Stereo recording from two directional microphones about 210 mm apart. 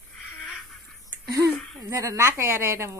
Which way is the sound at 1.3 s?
15° right (ahead or behind).